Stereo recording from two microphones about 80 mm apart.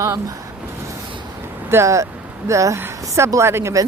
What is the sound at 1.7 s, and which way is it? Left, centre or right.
Speech, right.